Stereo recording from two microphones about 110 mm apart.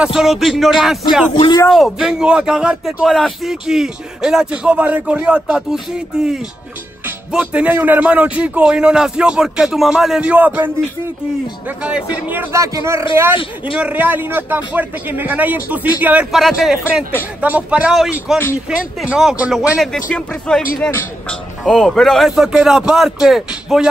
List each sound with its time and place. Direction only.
0.0 s a man's voice: 5° right (ahead or behind)
12.5 s a man's voice: 30° right (ahead or behind)
16.3 s a man's voice: centre (ahead or behind)
19.8 s a man's voice: 5° left (ahead or behind)